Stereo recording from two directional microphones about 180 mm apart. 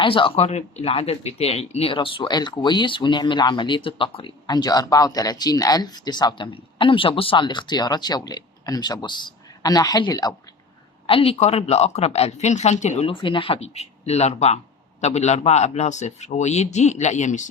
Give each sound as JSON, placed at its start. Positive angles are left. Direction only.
{"t": 0.0, "sound": "speech", "side_deg": 30}
{"t": 11.0, "sound": "speech", "side_deg": 30}